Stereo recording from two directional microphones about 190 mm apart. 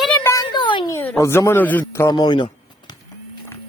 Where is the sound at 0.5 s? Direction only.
25° left (ahead or behind).